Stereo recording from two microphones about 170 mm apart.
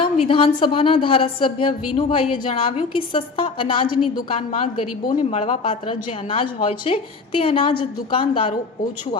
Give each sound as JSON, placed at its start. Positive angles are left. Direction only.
{"t": 0.0, "sound": "a woman's voice", "side_deg": 30}